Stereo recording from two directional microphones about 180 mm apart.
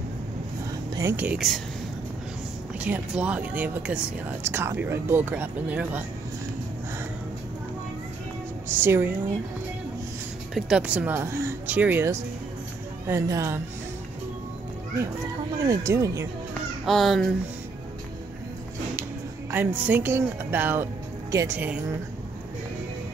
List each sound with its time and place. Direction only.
0.9 s speech: 10° right (ahead or behind)
2.8 s speech: 5° right (ahead or behind)
8.6 s a woman's voice: 15° right (ahead or behind)
10.5 s speech: 5° right (ahead or behind)
15.6 s speech: 20° right (ahead or behind)
16.8 s a child's voice: centre (ahead or behind)
19.5 s speech: 10° right (ahead or behind)